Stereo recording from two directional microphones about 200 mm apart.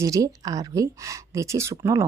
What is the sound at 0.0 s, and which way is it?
A woman's voice, 15° right (ahead or behind).